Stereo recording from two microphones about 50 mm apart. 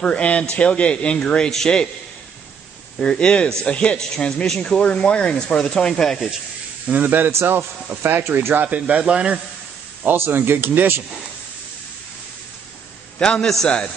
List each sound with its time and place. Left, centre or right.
0.0 s speech: left
3.0 s speech: centre
6.9 s speech: right
8.6 s speech: right
10.1 s speech: right
13.2 s speech: centre